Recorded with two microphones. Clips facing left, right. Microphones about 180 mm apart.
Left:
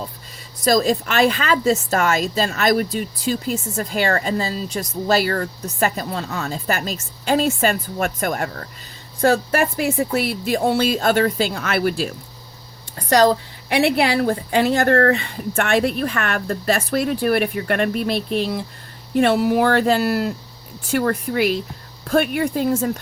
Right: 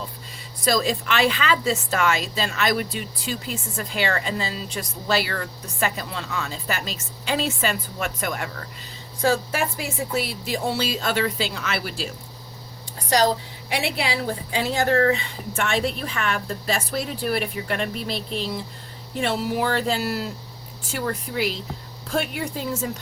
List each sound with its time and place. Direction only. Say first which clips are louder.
0.6 s a woman's voice: left 5 dB; 45° left (ahead or behind)
9.2 s a woman's voice: left 5 dB; 60° left (ahead or behind)